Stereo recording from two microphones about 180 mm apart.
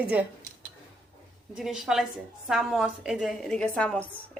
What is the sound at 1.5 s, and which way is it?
A woman's voice, 5° right (ahead or behind).